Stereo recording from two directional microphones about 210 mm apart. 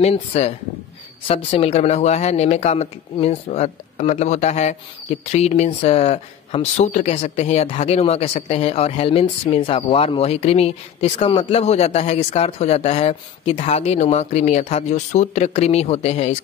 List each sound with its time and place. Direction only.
0.0 s speech: 30° left (ahead or behind)